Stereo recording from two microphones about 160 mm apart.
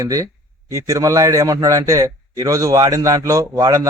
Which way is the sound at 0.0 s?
20° right (ahead or behind).